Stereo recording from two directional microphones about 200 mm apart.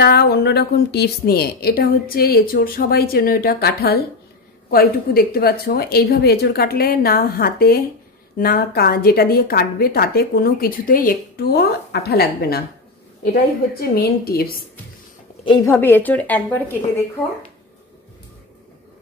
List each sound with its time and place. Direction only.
0.0 s a woman's voice: 55° left (ahead or behind)
15.6 s speech: 10° left (ahead or behind)